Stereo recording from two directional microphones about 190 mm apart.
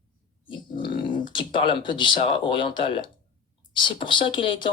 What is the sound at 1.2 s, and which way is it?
Speech, 25° left (ahead or behind).